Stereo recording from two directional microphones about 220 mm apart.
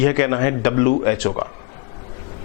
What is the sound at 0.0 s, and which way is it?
Speech, 15° left (ahead or behind).